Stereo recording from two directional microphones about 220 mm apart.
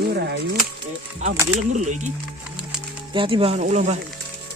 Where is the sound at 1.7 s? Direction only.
35° right (ahead or behind).